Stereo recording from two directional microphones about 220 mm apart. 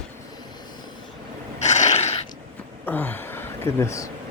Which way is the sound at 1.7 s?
30° left (ahead or behind).